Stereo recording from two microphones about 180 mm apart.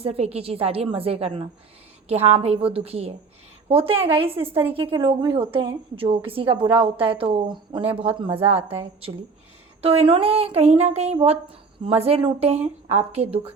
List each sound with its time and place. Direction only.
0.0 s a woman's voice: 35° right (ahead or behind)